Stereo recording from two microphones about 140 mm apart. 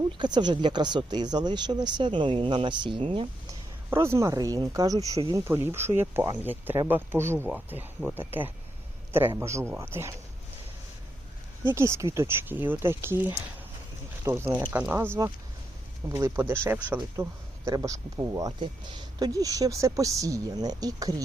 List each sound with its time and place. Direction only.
0.2 s speech: 30° right (ahead or behind)
3.8 s speech: 20° right (ahead or behind)
11.6 s speech: 20° right (ahead or behind)
17.7 s speech: 25° right (ahead or behind)